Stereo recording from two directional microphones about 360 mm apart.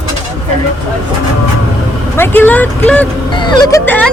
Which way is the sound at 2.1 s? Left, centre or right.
Centre.